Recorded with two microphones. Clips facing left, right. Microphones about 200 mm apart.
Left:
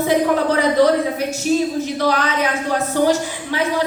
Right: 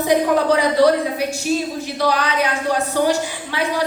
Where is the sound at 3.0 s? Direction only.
15° right (ahead or behind).